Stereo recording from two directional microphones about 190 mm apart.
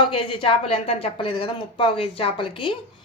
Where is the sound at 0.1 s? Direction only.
30° left (ahead or behind).